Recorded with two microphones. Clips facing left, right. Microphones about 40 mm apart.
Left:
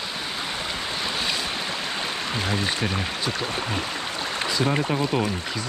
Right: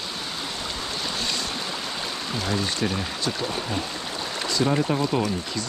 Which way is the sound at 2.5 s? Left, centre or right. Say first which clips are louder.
Right 2 dB; centre.